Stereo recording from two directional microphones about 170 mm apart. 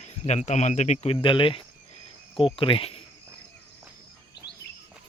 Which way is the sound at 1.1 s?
30° left (ahead or behind).